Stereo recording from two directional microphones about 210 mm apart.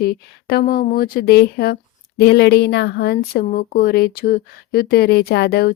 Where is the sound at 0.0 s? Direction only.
45° left (ahead or behind).